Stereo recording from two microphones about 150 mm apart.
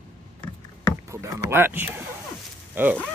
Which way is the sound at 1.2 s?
15° right (ahead or behind).